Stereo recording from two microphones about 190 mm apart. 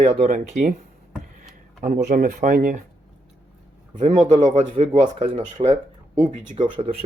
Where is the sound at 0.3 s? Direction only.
40° right (ahead or behind).